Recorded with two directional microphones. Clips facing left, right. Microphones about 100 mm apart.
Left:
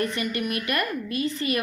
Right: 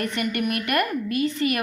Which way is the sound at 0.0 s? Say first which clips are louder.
Right 2 dB; 55° right (ahead or behind).